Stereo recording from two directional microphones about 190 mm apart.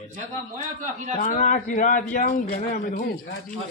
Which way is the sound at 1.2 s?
40° left (ahead or behind).